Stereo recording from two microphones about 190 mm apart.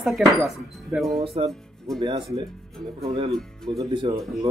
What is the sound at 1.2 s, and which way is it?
Speech, 30° right (ahead or behind).